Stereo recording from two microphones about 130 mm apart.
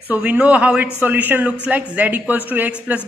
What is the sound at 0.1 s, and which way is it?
A man's voice, 15° right (ahead or behind).